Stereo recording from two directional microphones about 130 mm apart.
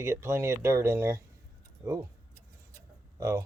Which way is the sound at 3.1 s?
25° right (ahead or behind).